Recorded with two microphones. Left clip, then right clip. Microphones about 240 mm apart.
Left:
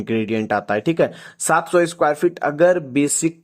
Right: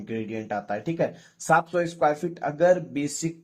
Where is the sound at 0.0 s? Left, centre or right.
Left.